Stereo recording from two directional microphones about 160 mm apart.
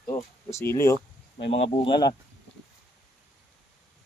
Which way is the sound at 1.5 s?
40° left (ahead or behind).